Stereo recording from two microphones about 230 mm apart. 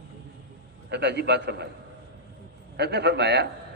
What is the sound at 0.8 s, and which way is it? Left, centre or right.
Speech, right.